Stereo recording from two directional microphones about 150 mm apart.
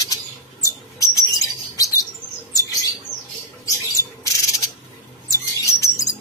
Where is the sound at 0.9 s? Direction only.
20° left (ahead or behind).